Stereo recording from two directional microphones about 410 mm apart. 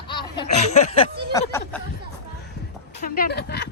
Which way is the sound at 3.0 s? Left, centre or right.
Left.